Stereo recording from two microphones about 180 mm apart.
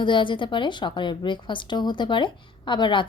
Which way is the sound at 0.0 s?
25° left (ahead or behind).